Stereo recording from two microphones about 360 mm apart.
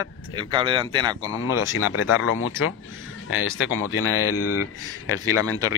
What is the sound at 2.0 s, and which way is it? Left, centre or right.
Speech, left.